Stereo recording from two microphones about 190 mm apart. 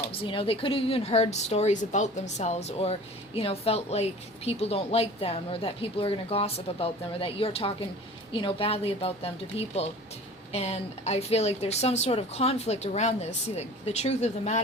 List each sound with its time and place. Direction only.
0.1 s a woman's voice: 30° left (ahead or behind)